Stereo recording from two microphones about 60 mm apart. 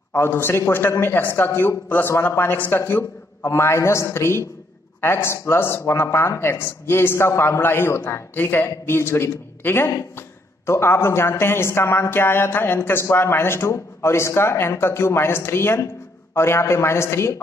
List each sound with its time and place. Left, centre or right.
0.1 s a man's voice: left
3.4 s speech: left